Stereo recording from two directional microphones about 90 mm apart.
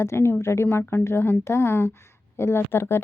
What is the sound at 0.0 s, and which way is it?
A woman's voice, 30° left (ahead or behind).